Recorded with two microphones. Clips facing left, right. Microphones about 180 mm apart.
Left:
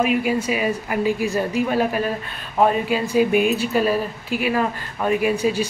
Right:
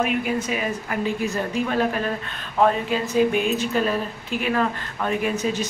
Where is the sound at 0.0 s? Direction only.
10° left (ahead or behind).